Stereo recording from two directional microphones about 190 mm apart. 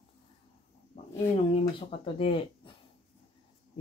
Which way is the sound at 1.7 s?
25° left (ahead or behind).